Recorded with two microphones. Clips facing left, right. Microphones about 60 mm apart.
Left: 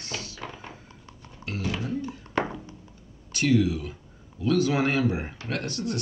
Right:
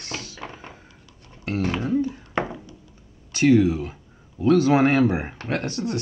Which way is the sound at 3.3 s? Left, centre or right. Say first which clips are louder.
Right 6 dB; right.